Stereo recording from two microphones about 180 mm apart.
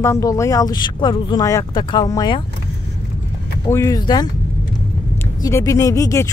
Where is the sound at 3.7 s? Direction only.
15° left (ahead or behind).